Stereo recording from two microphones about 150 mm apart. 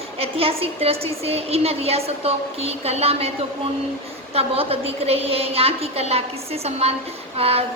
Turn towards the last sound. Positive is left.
turn(degrees=-40)  # may be behind; listen again after turning